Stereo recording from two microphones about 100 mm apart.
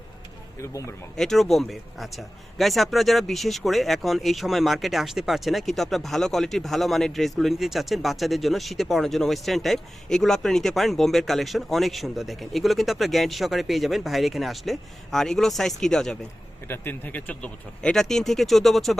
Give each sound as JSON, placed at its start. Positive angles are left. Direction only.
{"t": 0.6, "sound": "speech", "side_deg": 30}
{"t": 1.1, "sound": "speech", "side_deg": 5}
{"t": 16.6, "sound": "speech", "side_deg": 20}